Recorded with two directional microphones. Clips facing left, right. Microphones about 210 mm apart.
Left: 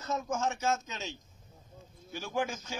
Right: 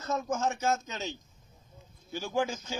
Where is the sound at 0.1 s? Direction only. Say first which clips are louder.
Right 2 dB; 35° right (ahead or behind).